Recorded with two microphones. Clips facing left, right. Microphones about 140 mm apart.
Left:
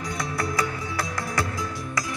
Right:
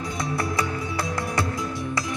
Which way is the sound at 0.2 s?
25° right (ahead or behind).